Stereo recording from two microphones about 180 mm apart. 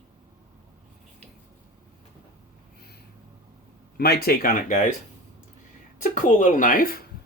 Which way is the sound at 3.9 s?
60° left (ahead or behind).